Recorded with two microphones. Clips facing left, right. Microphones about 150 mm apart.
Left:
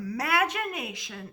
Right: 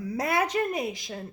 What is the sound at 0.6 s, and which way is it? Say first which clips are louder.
Speech: right 6 dB; 30° right (ahead or behind).